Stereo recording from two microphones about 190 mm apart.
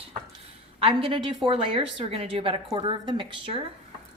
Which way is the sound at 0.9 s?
25° right (ahead or behind).